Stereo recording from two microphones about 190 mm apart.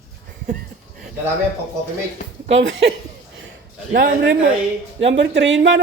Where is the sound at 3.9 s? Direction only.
55° right (ahead or behind).